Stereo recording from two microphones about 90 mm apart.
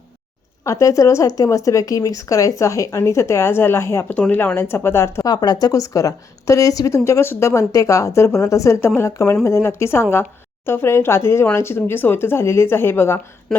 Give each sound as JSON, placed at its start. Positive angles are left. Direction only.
{"t": 0.6, "sound": "a woman's voice", "side_deg": 35}
{"t": 4.1, "sound": "speech", "side_deg": 15}
{"t": 5.3, "sound": "a woman's voice", "side_deg": 50}